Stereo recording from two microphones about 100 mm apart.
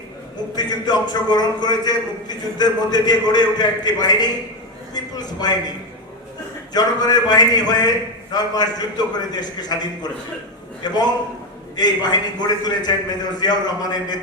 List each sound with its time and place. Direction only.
0.5 s a man's voice: 45° left (ahead or behind)
6.7 s a man's voice: 40° left (ahead or behind)